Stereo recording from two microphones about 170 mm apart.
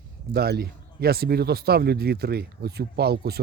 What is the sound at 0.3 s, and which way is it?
Speech, 70° right (ahead or behind).